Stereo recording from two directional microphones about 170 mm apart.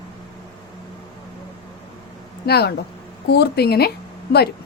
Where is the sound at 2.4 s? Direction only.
70° left (ahead or behind).